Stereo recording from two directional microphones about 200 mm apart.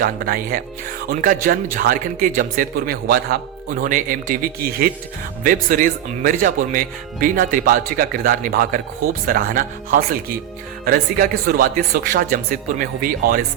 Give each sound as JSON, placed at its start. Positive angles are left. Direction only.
{"t": 0.0, "sound": "speech", "side_deg": -45}